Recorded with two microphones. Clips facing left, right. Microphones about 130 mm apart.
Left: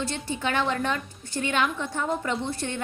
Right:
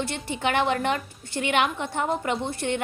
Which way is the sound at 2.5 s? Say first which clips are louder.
Right 5 dB; 60° right (ahead or behind).